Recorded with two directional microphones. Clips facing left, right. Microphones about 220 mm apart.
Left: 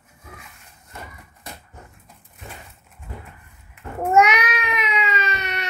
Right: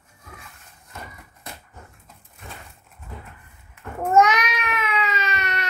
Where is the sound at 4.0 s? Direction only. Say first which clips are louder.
Even; 15° left (ahead or behind).